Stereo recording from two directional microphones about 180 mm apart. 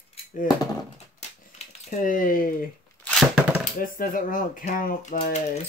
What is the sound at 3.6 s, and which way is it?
Speech, 50° left (ahead or behind).